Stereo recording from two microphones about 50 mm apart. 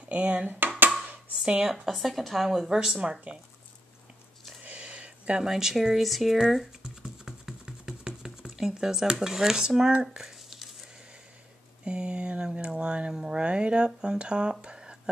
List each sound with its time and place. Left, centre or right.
0.1 s speech: right
1.6 s speech: centre
4.6 s a sound: right
5.4 s speech: centre
6.8 s typing: centre
11.8 s speech: centre